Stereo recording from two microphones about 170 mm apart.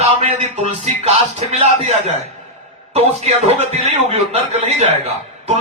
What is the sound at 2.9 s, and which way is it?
Speech, 40° right (ahead or behind).